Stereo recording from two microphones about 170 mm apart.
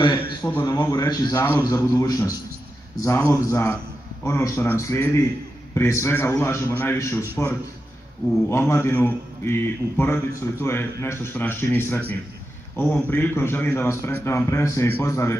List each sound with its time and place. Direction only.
0.0 s a sound: 25° left (ahead or behind)
0.5 s a man's voice: 10° left (ahead or behind)
0.7 s a man's voice: 20° left (ahead or behind)